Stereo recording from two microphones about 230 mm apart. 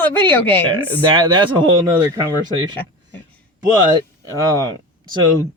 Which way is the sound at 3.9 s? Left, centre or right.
Centre.